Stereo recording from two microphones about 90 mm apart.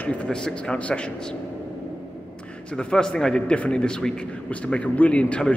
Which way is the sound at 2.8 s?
10° left (ahead or behind).